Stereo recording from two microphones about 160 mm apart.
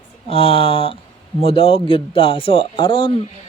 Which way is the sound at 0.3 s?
35° left (ahead or behind).